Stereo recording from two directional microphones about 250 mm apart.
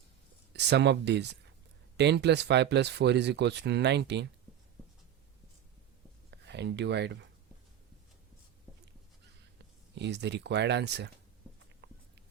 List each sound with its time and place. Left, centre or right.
0.5 s speech: right
6.3 s speech: right
9.9 s speech: right
11.8 s a sound: right